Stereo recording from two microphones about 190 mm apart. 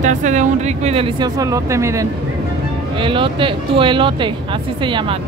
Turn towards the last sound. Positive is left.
turn(degrees=-25)  # may be behind; listen again after turning